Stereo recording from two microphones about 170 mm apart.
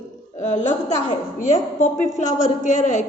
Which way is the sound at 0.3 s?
45° left (ahead or behind).